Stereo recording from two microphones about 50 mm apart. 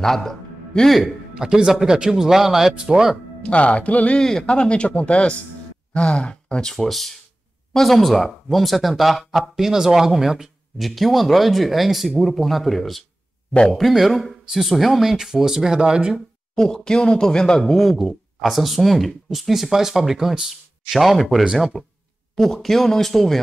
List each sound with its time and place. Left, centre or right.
0.0 s speech: centre
1.0 s speech: centre
3.4 s speech: left
4.2 s a man's voice: centre
6.7 s speech: centre
16.5 s speech: centre